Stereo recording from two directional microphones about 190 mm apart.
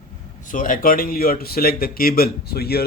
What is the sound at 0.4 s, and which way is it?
Speech, 45° left (ahead or behind).